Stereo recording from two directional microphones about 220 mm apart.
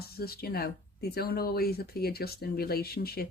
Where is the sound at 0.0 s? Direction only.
45° left (ahead or behind).